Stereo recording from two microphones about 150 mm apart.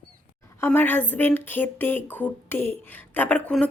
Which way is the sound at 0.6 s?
15° left (ahead or behind).